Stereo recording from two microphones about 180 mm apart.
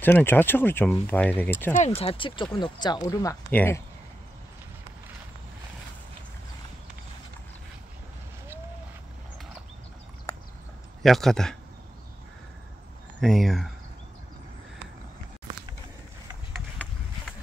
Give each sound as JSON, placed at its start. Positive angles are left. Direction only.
{"t": 0.0, "sound": "speech", "side_deg": 10}
{"t": 2.0, "sound": "speech", "side_deg": 30}
{"t": 11.0, "sound": "speech", "side_deg": 0}
{"t": 13.2, "sound": "speech", "side_deg": 0}